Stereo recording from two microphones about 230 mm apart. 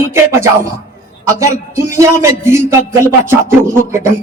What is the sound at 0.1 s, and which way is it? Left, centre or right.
A man's voice, centre.